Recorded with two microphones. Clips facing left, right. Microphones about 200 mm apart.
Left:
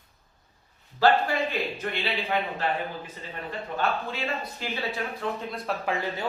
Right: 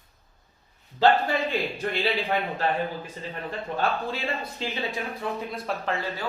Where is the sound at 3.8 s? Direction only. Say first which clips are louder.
Right 1 dB; 30° right (ahead or behind).